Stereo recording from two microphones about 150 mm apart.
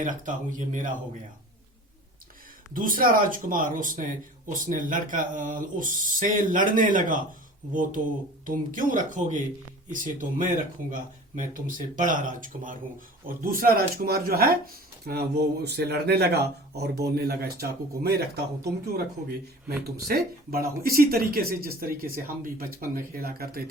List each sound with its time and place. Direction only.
0.0 s speech: 60° right (ahead or behind)
2.7 s speech: 70° right (ahead or behind)
13.2 s speech: 70° right (ahead or behind)
15.0 s speech: 90° right
19.6 s speech: 90° right